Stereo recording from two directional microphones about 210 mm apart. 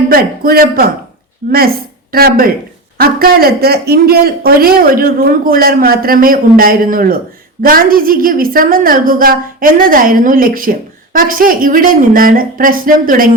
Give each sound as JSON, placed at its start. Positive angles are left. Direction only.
{"t": 0.1, "sound": "a man's voice", "side_deg": -45}